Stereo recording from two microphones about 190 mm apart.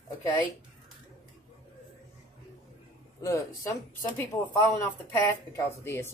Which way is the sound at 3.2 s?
15° left (ahead or behind).